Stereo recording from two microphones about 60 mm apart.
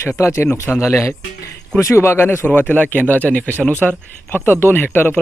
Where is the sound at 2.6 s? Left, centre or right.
Left.